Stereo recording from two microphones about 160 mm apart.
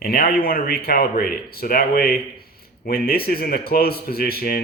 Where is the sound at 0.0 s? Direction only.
70° left (ahead or behind).